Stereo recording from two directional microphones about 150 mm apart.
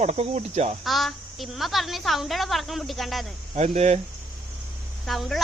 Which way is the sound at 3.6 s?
45° right (ahead or behind).